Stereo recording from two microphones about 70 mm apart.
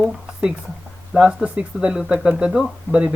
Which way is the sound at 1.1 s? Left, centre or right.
Centre.